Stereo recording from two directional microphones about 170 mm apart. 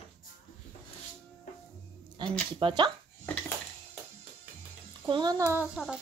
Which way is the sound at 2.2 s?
25° right (ahead or behind).